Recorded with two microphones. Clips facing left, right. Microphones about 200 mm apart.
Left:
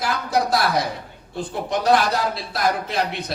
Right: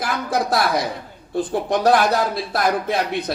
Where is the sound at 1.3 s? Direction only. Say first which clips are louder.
Right 5 dB; 55° right (ahead or behind).